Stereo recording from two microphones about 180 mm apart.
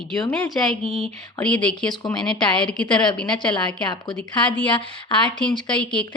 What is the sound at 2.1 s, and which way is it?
Speech, 5° left (ahead or behind).